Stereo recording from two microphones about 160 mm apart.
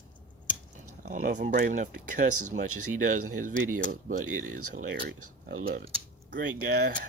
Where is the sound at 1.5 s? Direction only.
55° right (ahead or behind).